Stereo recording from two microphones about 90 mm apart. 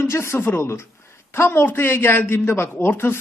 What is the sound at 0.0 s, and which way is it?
Speech, 30° left (ahead or behind).